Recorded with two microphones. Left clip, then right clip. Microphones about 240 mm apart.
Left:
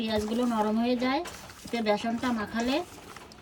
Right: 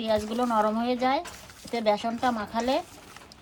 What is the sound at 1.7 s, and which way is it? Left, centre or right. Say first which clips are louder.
Speech: right 2 dB; centre.